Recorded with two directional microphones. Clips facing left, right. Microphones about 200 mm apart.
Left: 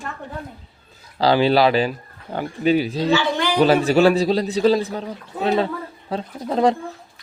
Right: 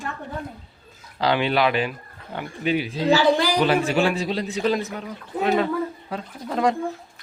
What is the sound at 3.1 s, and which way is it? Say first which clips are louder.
Speech: right 4 dB; 35° right (ahead or behind).